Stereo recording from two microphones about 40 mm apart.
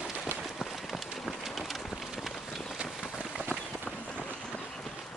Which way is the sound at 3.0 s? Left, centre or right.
Centre.